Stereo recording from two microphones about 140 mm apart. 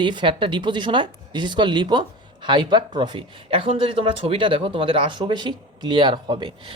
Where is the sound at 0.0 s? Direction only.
35° right (ahead or behind).